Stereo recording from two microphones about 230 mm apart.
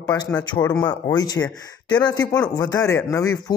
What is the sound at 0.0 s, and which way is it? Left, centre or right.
Speech, centre.